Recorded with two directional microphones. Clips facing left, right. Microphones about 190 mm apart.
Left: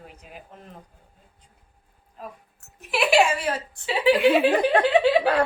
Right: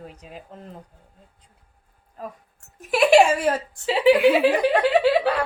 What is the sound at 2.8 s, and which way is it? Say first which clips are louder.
Speech: right 5 dB; 45° right (ahead or behind).